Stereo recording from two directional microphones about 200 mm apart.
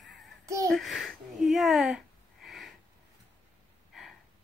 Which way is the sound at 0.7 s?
Centre (ahead or behind).